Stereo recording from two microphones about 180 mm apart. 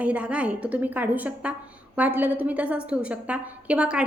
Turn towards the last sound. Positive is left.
turn(degrees=-5)  # may be behind; listen again after turning